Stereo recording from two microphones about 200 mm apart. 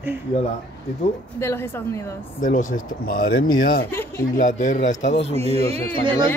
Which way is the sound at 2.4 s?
40° left (ahead or behind).